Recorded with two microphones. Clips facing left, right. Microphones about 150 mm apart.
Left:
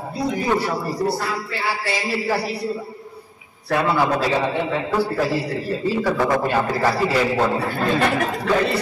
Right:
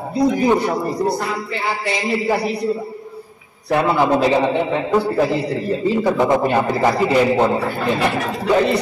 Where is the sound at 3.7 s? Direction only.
20° right (ahead or behind).